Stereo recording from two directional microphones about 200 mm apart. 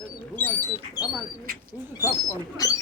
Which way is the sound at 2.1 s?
15° left (ahead or behind).